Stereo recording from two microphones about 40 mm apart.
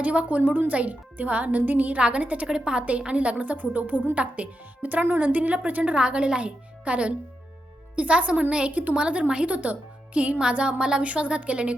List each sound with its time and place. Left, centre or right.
0.0 s speech: right
2.0 s speech: right
2.5 s speech: right
3.6 s speech: right
6.0 s speech: right
9.5 s speech: right